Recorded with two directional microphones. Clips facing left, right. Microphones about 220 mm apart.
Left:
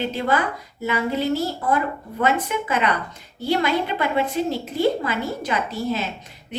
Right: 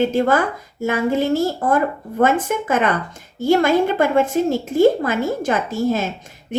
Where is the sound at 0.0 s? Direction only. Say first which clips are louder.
Right 6 dB; 50° right (ahead or behind).